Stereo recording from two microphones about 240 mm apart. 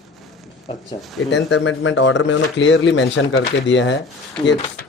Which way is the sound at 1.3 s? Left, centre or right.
Left.